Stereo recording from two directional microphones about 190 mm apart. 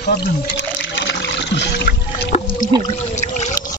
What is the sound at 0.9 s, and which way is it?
Trickle, 65° left (ahead or behind).